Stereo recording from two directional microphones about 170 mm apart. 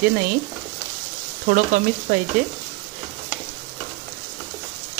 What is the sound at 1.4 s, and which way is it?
Frying, 50° right (ahead or behind).